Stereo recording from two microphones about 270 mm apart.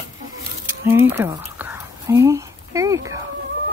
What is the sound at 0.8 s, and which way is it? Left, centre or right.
Whispering, centre.